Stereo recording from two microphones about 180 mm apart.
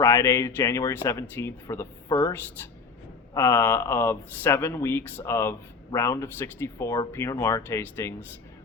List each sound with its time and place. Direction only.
0.0 s speech: 15° left (ahead or behind)
3.3 s speech: 10° left (ahead or behind)